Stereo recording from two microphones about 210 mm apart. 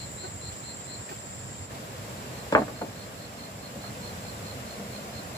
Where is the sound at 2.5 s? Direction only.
15° left (ahead or behind).